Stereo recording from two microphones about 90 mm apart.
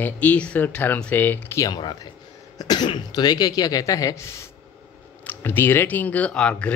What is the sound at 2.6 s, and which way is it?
Speech, 50° left (ahead or behind).